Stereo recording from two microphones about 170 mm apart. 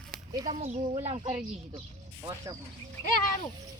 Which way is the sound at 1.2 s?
25° right (ahead or behind).